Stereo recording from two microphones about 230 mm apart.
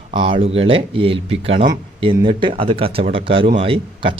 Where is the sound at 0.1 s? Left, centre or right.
Right.